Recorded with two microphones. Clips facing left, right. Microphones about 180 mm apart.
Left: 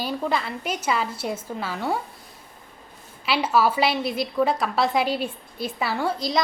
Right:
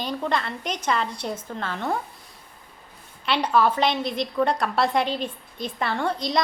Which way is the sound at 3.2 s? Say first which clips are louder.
Even; 5° left (ahead or behind).